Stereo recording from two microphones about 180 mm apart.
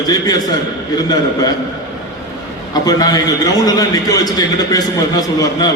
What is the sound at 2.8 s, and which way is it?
A man's voice, 20° left (ahead or behind).